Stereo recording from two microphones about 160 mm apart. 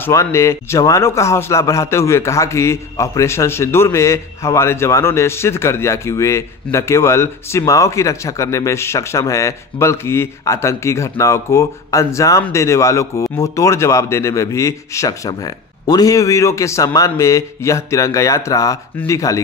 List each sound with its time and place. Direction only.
0.0 s a man's voice: 15° left (ahead or behind)